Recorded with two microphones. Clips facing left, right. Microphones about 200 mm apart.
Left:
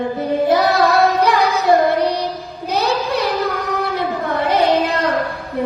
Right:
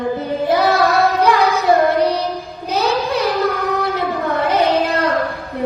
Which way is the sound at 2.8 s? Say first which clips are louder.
Right 1 dB; 60° left (ahead or behind).